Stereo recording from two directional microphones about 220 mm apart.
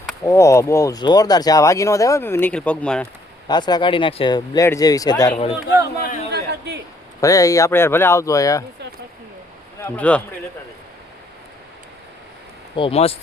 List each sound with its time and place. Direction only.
0.2 s speech: 15° left (ahead or behind)
3.5 s speech: 20° left (ahead or behind)
6.3 s a sound: 50° right (ahead or behind)
7.2 s speech: 15° left (ahead or behind)
9.8 s speech: 5° left (ahead or behind)
12.7 s speech: 25° left (ahead or behind)